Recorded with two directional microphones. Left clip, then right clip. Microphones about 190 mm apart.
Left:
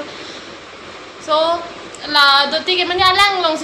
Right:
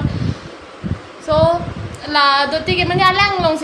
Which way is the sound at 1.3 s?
20° right (ahead or behind).